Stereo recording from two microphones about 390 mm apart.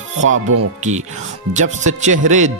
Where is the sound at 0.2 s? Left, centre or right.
Right.